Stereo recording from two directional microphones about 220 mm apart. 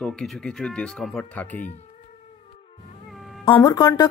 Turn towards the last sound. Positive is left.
turn(degrees=15)  # may be behind; listen again after turning